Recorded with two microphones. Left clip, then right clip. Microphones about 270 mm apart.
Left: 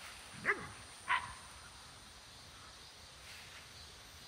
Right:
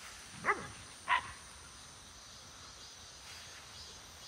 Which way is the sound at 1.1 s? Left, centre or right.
Right.